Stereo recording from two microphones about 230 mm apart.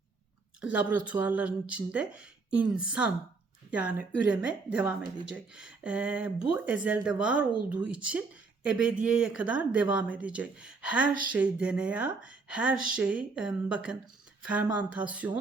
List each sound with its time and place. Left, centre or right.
0.6 s a woman's voice: centre